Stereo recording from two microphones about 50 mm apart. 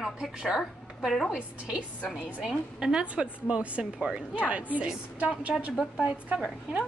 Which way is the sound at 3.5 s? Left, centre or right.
Right.